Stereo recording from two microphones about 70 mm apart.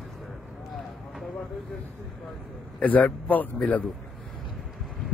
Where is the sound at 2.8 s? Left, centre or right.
Left.